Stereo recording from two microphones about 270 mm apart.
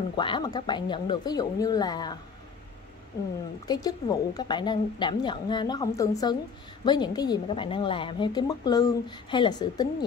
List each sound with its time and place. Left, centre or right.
0.1 s a woman's voice: centre
3.6 s a woman's voice: centre